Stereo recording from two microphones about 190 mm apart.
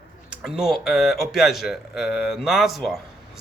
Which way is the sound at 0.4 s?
Centre (ahead or behind).